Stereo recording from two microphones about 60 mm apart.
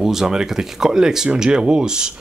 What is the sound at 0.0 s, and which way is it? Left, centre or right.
Speech, centre.